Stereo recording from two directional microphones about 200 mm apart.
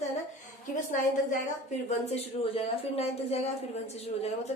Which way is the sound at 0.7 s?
40° left (ahead or behind).